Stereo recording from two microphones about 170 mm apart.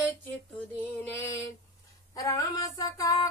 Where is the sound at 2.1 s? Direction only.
20° left (ahead or behind).